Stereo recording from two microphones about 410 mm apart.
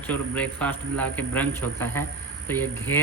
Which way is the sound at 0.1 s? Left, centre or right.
Centre.